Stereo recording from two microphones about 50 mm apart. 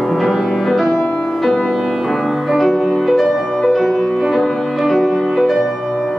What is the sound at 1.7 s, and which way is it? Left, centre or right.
Music, centre.